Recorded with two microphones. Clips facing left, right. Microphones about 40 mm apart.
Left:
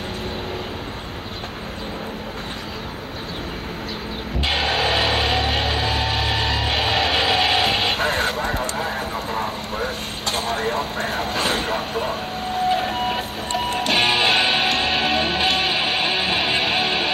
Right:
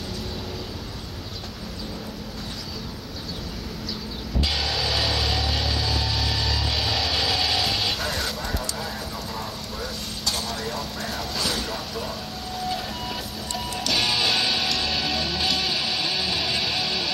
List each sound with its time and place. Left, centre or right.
4.5 s music: left